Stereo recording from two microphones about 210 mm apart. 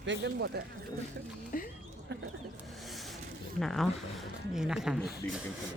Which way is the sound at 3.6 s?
Centre (ahead or behind).